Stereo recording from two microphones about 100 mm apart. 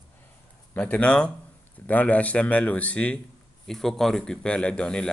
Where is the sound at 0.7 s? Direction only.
15° left (ahead or behind).